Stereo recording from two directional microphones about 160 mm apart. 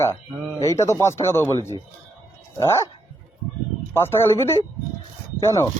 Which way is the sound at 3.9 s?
15° left (ahead or behind).